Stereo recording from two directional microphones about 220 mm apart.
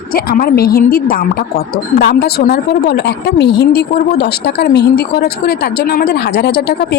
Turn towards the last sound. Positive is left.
turn(degrees=50)  # may be behind; listen again after turning